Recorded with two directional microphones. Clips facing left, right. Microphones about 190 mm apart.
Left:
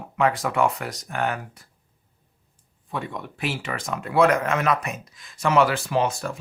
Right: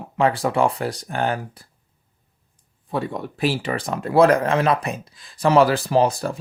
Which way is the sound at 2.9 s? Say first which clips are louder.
Right 6 dB; 35° right (ahead or behind).